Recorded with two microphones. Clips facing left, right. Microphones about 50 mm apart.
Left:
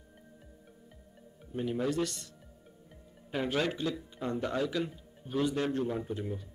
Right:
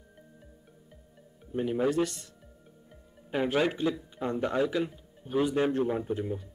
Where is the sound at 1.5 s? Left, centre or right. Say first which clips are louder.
Right 4 dB; centre.